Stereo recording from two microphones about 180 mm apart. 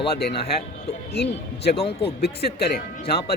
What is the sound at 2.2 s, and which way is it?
Speech, 60° left (ahead or behind).